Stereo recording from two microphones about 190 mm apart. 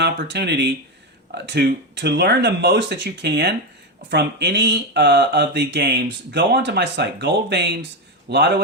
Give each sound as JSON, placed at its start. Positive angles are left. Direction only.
{"t": 0.0, "sound": "speech", "side_deg": -65}